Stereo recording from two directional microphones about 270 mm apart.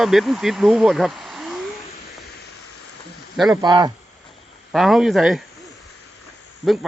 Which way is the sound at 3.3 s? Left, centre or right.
Centre.